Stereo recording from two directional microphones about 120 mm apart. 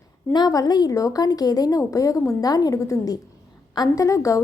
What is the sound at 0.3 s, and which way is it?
A woman's voice, 35° left (ahead or behind).